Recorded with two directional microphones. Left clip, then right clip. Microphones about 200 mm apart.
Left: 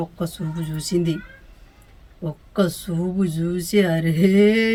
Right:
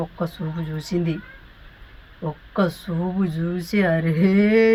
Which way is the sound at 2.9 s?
20° left (ahead or behind).